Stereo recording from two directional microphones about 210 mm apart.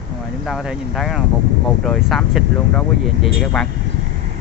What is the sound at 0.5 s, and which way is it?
Speech, centre (ahead or behind).